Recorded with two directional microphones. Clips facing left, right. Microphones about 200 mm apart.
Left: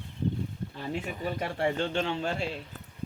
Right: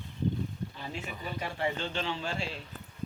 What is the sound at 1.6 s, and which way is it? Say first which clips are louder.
Speech: left 5 dB; 50° left (ahead or behind).